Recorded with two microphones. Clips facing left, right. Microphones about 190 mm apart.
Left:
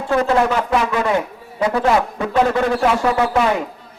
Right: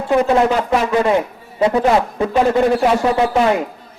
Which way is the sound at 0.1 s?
20° right (ahead or behind).